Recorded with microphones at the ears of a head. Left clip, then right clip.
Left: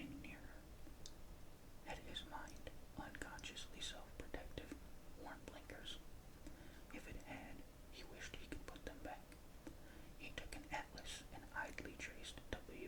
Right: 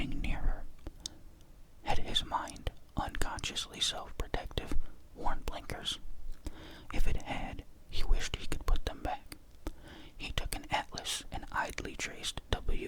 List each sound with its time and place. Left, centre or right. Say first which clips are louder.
0.0 s whispering: right 14 dB; right